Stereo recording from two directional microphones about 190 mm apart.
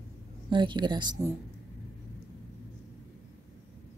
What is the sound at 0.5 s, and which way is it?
Speech, 25° right (ahead or behind).